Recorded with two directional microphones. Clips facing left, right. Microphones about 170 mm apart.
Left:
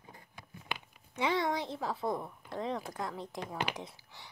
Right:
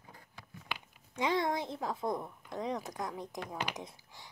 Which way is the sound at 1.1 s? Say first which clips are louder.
Even; 15° right (ahead or behind).